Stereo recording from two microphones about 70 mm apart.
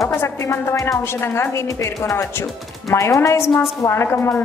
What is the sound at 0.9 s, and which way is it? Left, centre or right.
A woman's voice, left.